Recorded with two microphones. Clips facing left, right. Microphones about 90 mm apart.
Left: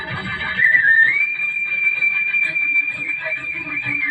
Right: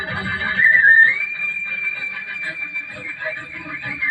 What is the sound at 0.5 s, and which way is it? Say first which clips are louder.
Music: right 2 dB; 20° right (ahead or behind).